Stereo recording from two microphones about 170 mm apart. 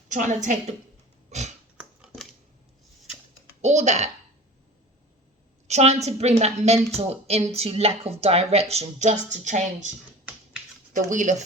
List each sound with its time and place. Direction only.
0.1 s a woman's voice: 45° right (ahead or behind)
1.3 s sniff: 40° right (ahead or behind)
1.8 s scissors: 5° right (ahead or behind)
3.6 s speech: 45° right (ahead or behind)
5.6 s a woman's voice: 40° right (ahead or behind)
11.1 s speech: 45° right (ahead or behind)